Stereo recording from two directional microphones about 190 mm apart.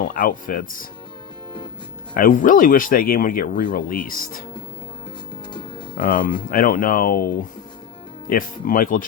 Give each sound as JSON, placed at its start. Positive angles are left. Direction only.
{"t": 0.0, "sound": "speech", "side_deg": 50}
{"t": 2.1, "sound": "speech", "side_deg": 45}
{"t": 6.0, "sound": "speech", "side_deg": 50}